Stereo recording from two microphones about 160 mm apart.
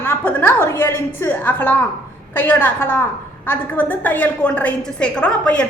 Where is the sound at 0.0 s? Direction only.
15° left (ahead or behind).